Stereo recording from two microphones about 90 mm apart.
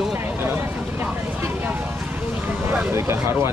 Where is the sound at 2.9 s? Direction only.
30° right (ahead or behind).